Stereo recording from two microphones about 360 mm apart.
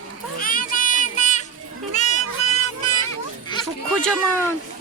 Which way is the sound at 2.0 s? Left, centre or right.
Centre.